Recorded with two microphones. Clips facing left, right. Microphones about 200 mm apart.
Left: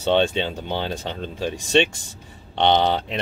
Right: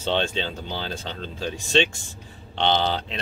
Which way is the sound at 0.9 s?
15° left (ahead or behind).